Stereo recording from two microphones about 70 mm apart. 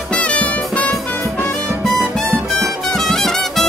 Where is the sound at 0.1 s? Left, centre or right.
Centre.